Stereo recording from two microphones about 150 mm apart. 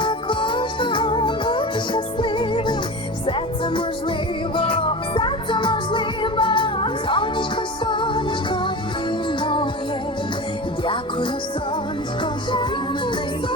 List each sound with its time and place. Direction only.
0.0 s music: 35° left (ahead or behind)
12.2 s music: 30° left (ahead or behind)